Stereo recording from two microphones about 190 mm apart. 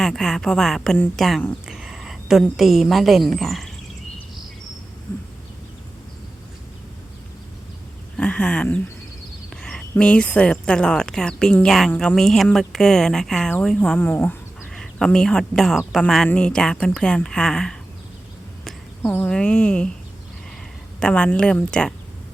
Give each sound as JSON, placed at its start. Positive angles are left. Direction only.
{"t": 0.0, "sound": "a woman's voice", "side_deg": 5}
{"t": 8.1, "sound": "speech", "side_deg": 5}
{"t": 21.0, "sound": "speech", "side_deg": 5}